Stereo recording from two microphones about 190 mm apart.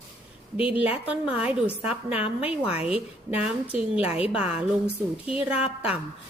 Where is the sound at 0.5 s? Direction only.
30° left (ahead or behind).